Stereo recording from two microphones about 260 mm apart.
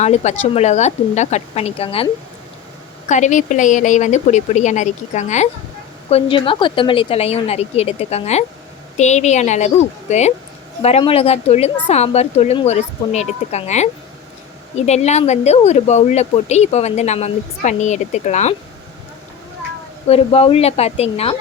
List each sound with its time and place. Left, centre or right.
0.0 s speech: left
3.1 s speech: left
20.1 s speech: left